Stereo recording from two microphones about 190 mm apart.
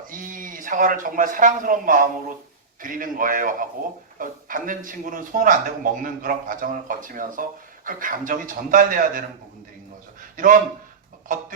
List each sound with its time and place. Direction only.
0.1 s speech: 45° right (ahead or behind)
10.3 s speech: 45° right (ahead or behind)